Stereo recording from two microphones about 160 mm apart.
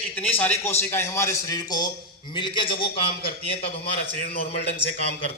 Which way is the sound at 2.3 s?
30° left (ahead or behind).